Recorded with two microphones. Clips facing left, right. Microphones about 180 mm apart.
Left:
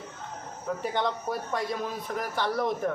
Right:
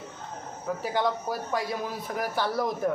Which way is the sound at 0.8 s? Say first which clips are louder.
Right 2 dB; centre (ahead or behind).